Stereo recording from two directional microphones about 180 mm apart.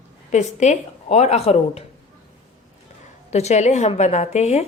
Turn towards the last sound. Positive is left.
turn(degrees=40)  # may be behind; listen again after turning